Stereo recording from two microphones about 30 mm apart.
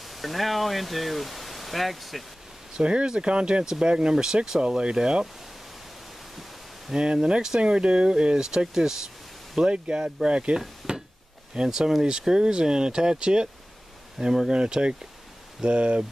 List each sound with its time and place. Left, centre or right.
0.0 s speech: centre
2.7 s speech: right
4.6 s speech: right
7.0 s speech: right
9.7 s speech: right
10.8 s a sound: centre
11.5 s speech: right
14.1 s speech: centre
14.5 s speech: right